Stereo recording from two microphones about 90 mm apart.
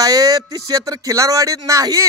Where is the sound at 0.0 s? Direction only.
40° right (ahead or behind).